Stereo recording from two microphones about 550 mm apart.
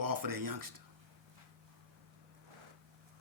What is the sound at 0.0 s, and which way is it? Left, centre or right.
Speech, right.